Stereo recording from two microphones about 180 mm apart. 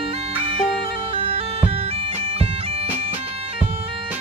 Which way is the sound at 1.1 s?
30° right (ahead or behind).